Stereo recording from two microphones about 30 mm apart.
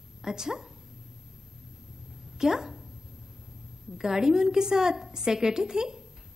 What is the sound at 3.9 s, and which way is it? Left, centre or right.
A woman's voice, centre.